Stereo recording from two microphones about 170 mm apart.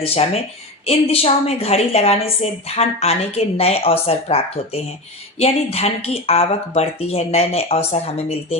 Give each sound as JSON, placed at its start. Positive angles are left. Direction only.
{"t": 0.0, "sound": "a woman's voice", "side_deg": 35}